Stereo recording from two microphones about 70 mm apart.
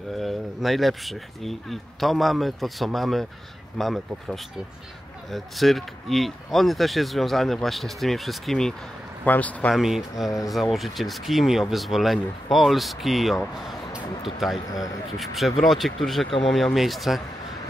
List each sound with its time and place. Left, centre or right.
0.1 s speech: centre
9.2 s a man's voice: left
9.8 s speech: centre